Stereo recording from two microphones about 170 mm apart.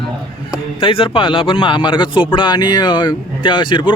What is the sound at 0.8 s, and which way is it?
Speech, 30° left (ahead or behind).